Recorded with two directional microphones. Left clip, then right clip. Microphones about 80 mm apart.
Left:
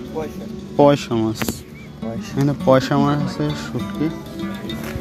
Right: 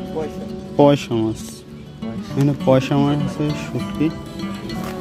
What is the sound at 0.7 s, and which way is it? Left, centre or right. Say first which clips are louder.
Speech: even; right.